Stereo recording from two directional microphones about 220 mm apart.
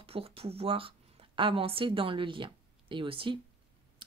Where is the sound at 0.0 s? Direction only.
25° right (ahead or behind).